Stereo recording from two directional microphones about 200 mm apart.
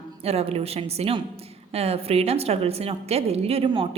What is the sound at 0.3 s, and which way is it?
A woman's voice, 30° right (ahead or behind).